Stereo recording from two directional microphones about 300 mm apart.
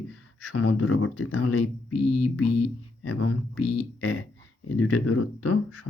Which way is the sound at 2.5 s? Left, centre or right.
Left.